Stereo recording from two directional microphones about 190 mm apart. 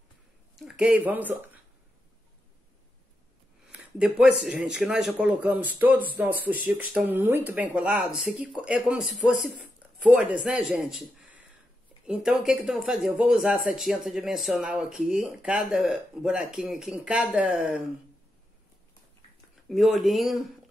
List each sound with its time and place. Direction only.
0.7 s speech: 5° right (ahead or behind)
3.7 s speech: 5° right (ahead or behind)
19.7 s speech: centre (ahead or behind)